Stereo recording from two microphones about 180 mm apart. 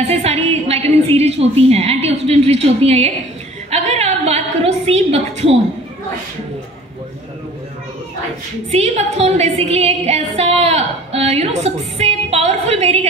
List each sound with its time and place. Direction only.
0.0 s a woman's voice: 35° right (ahead or behind)
3.7 s a sound: 35° right (ahead or behind)
4.8 s a woman's voice: 35° right (ahead or behind)
8.7 s a woman's voice: 35° right (ahead or behind)